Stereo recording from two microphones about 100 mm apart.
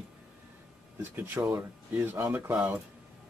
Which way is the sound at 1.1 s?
20° right (ahead or behind).